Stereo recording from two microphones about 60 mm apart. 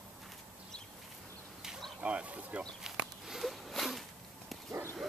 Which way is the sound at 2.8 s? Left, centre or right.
Centre.